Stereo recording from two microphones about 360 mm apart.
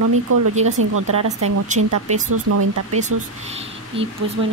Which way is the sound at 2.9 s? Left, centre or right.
Centre.